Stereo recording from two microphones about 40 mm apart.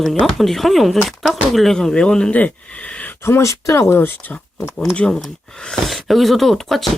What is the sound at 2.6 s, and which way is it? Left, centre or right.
Speech, left.